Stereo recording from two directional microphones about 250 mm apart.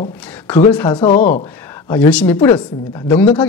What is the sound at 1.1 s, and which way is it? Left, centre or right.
Speech, left.